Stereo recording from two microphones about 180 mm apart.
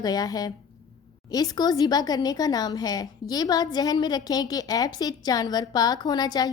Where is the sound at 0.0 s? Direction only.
20° left (ahead or behind).